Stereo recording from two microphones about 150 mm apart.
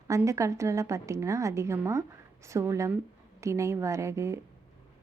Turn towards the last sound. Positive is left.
turn(degrees=-20)  # may be behind; listen again after turning